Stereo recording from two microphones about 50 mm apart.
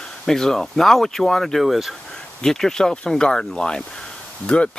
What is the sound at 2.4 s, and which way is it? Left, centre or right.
Speech, centre.